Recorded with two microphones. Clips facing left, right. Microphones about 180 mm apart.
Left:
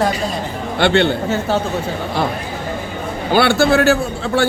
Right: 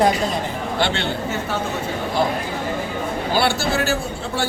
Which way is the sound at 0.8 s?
60° left (ahead or behind).